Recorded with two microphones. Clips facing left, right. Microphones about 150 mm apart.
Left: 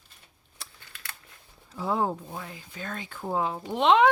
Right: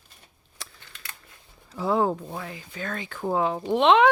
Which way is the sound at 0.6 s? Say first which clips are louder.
Right 3 dB; 90° right.